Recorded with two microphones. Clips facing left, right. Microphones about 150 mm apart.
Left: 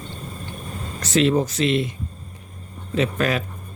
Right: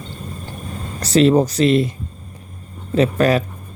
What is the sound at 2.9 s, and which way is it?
Speech, 40° right (ahead or behind).